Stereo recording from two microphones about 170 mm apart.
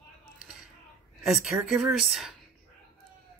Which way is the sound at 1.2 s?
Centre (ahead or behind).